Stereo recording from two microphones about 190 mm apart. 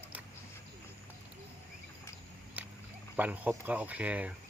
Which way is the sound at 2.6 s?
10° right (ahead or behind).